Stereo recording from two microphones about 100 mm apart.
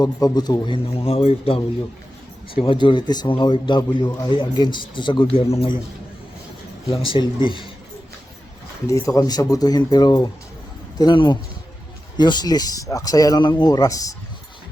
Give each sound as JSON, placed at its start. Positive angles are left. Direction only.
{"t": 0.0, "sound": "a man's voice", "side_deg": 40}
{"t": 2.6, "sound": "a man's voice", "side_deg": 60}
{"t": 7.1, "sound": "speech", "side_deg": 55}
{"t": 8.9, "sound": "a man's voice", "side_deg": 30}